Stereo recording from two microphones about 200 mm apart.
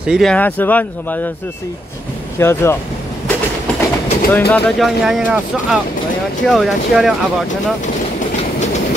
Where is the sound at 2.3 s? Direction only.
15° left (ahead or behind).